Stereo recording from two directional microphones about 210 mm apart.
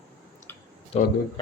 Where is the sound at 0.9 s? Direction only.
30° left (ahead or behind).